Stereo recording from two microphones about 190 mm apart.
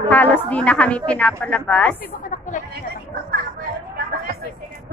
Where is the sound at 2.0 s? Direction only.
45° left (ahead or behind).